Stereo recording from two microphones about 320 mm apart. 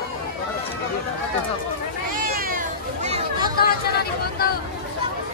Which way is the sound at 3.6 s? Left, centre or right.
Left.